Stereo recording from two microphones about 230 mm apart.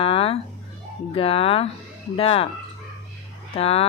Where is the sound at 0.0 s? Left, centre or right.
Left.